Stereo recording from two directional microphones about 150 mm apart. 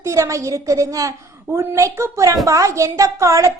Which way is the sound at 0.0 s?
20° right (ahead or behind).